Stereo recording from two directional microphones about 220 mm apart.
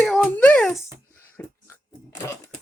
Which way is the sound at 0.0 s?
5° left (ahead or behind).